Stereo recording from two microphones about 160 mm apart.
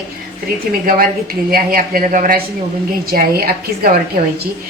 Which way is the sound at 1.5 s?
65° right (ahead or behind).